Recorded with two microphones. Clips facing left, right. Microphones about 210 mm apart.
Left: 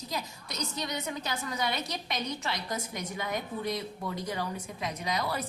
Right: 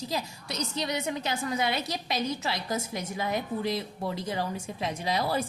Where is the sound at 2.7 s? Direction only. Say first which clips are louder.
Right 4 dB; 25° right (ahead or behind).